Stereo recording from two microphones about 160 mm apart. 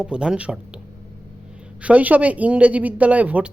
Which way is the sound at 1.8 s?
10° right (ahead or behind).